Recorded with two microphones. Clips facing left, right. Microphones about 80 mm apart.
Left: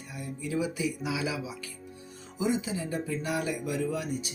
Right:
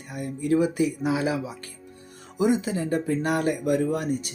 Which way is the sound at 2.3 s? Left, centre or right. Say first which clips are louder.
Right 7 dB; right.